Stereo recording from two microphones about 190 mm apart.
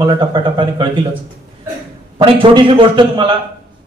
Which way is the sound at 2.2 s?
25° right (ahead or behind).